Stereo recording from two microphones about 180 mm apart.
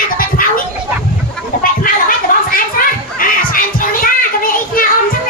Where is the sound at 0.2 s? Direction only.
50° left (ahead or behind).